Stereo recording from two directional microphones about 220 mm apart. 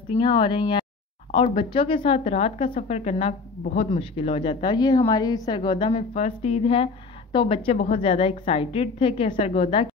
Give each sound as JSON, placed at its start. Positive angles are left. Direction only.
{"t": 0.1, "sound": "a woman's voice", "side_deg": 20}